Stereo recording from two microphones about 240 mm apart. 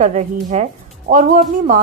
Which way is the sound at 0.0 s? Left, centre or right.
Right.